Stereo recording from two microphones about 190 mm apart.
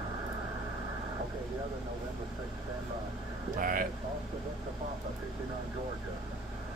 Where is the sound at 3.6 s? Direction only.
45° right (ahead or behind).